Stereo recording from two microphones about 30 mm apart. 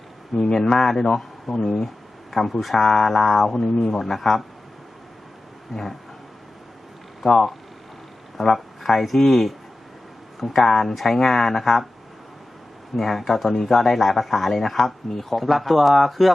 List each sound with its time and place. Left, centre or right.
0.3 s speech: centre
2.7 s speech: centre
3.7 s speech: centre
3.9 s speech: centre
8.5 s speech: centre
10.6 s speech: centre
13.0 s speech: centre